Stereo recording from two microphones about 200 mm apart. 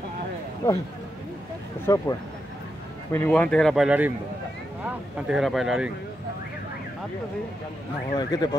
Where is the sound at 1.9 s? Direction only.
15° left (ahead or behind).